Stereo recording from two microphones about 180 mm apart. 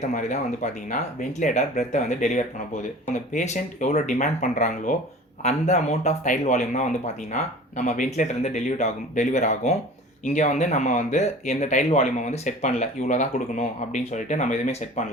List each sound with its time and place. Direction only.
0.0 s speech: 40° left (ahead or behind)